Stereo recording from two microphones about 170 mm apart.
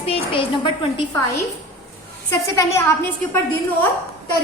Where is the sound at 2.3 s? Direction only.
15° left (ahead or behind).